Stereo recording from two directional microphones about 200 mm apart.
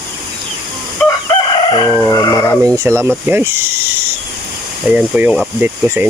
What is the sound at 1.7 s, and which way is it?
Chicken, 20° left (ahead or behind).